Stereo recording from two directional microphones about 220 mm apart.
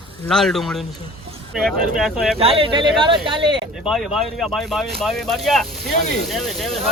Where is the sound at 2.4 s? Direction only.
25° right (ahead or behind).